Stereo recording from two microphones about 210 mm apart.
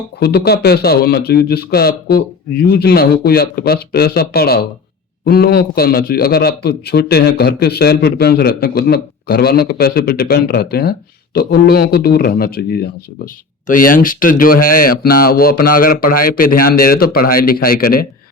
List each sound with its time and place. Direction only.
0.2 s a man's voice: 50° left (ahead or behind)